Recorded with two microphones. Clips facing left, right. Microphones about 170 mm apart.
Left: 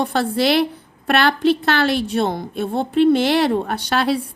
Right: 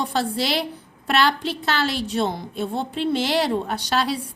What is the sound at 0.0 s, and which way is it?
A woman's voice, 60° left (ahead or behind).